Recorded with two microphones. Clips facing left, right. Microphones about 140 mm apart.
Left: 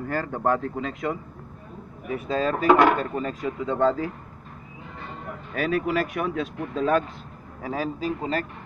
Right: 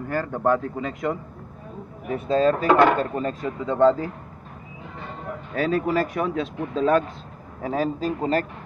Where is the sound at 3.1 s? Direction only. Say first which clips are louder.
Right 2 dB; 35° right (ahead or behind).